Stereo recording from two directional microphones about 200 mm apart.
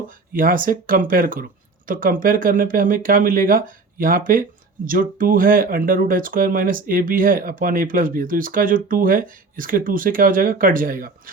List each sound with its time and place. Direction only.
0.3 s speech: 45° right (ahead or behind)